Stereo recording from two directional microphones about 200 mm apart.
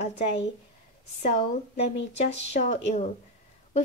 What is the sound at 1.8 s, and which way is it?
A woman's voice, 35° left (ahead or behind).